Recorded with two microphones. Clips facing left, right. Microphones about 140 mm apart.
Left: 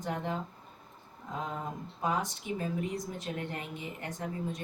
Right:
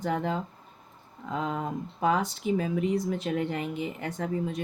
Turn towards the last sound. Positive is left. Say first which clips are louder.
# right 6 dB
turn(degrees=-70)  # may be behind; listen again after turning